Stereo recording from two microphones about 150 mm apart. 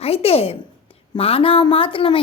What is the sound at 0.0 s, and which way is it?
A woman's voice, 40° left (ahead or behind).